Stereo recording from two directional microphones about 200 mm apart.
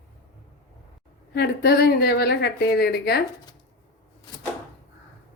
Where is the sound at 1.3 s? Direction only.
50° left (ahead or behind).